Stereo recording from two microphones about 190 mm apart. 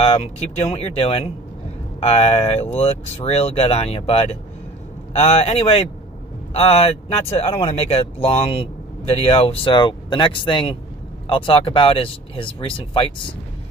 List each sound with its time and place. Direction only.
0.7 s speech: 35° left (ahead or behind)